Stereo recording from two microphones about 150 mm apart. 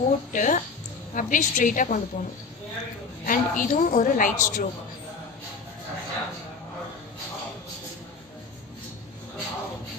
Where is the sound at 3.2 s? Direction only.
65° left (ahead or behind).